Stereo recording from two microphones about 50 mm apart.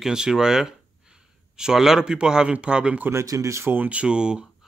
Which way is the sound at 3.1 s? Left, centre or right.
Right.